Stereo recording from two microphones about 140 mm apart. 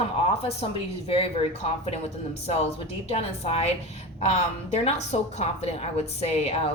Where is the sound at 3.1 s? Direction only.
45° left (ahead or behind).